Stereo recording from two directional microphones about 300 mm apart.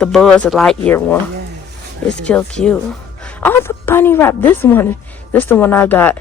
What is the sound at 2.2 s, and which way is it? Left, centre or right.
A woman's voice, centre.